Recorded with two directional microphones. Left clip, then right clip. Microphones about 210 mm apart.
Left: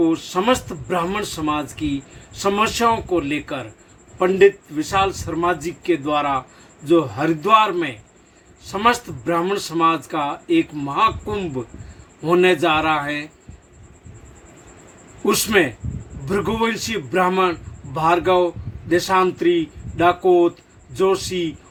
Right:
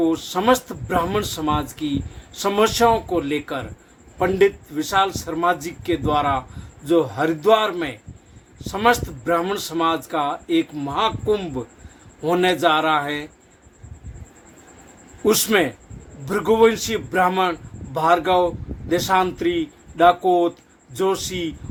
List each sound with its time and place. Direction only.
0.0 s speech: 15° right (ahead or behind)
4.7 s speech: 15° right (ahead or behind)
15.2 s speech: 15° right (ahead or behind)